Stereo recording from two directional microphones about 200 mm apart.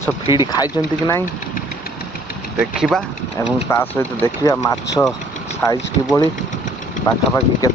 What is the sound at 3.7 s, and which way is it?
Speech, 15° left (ahead or behind).